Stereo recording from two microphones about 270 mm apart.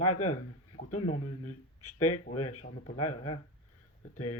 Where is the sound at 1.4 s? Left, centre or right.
Left.